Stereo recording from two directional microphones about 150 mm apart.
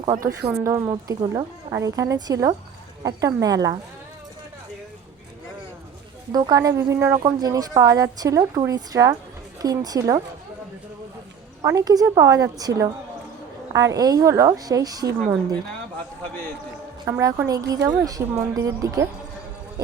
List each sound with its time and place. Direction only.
0.6 s a woman's voice: 20° right (ahead or behind)
6.3 s a woman's voice: 25° right (ahead or behind)
11.6 s a woman's voice: 25° right (ahead or behind)
17.1 s a woman's voice: 20° right (ahead or behind)